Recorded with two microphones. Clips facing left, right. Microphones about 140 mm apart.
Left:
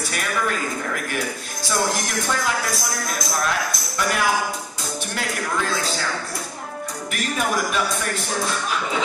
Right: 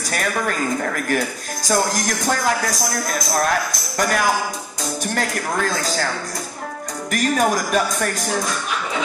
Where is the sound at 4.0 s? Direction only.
45° right (ahead or behind).